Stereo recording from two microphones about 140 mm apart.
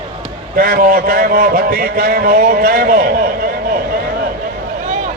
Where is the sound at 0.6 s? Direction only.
90° right.